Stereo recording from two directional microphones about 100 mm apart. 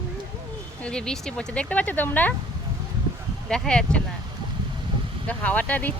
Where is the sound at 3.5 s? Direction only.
10° left (ahead or behind).